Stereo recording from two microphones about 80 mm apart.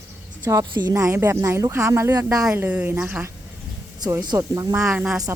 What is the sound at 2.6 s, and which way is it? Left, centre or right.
Speech, right.